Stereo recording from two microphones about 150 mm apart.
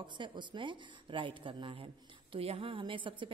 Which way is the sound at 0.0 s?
30° right (ahead or behind).